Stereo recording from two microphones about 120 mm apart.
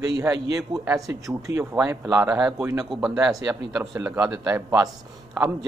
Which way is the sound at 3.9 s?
25° right (ahead or behind).